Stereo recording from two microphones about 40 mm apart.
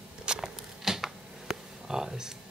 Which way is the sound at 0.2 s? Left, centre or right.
Right.